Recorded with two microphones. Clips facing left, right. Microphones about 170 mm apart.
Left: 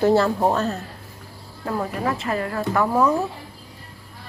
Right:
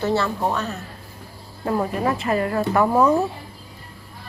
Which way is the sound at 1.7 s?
20° right (ahead or behind).